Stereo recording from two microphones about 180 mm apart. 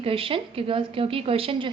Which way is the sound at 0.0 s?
30° right (ahead or behind).